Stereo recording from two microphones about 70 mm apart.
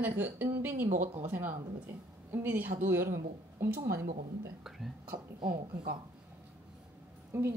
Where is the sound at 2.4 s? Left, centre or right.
Right.